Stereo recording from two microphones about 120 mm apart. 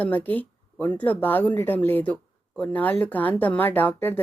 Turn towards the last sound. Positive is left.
turn(degrees=15)  # may be behind; listen again after turning